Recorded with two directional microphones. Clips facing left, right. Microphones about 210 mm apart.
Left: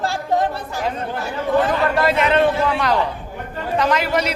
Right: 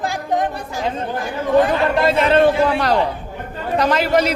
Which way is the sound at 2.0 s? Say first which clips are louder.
Right 3 dB; 30° right (ahead or behind).